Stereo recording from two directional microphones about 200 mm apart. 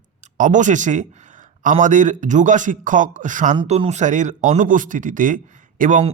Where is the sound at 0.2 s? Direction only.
40° right (ahead or behind).